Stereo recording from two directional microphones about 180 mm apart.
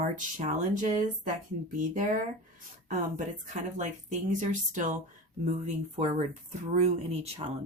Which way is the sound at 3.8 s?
45° right (ahead or behind).